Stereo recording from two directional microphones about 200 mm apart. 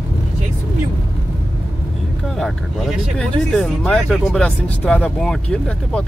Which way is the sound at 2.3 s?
Centre (ahead or behind).